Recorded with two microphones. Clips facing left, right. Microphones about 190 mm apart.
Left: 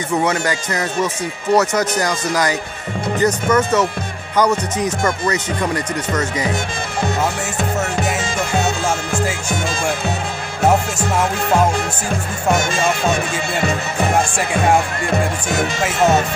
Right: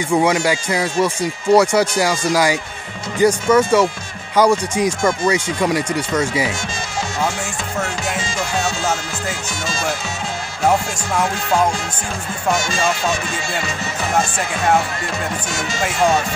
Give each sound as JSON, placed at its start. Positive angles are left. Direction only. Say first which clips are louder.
{"t": 0.1, "sound": "speech", "louder": "right 3 dB", "side_deg": -10}
{"t": 12.4, "sound": "speech", "louder": "left 2 dB", "side_deg": 55}